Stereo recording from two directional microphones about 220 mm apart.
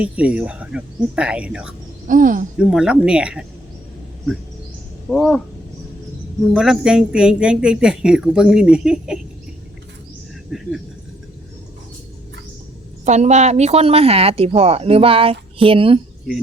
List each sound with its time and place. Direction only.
0.0 s speech: 5° right (ahead or behind)
2.0 s speech: 35° right (ahead or behind)
2.6 s speech: 5° right (ahead or behind)
5.0 s speech: centre (ahead or behind)
6.5 s speech: centre (ahead or behind)
10.5 s speech: centre (ahead or behind)
13.1 s a woman's voice: 30° right (ahead or behind)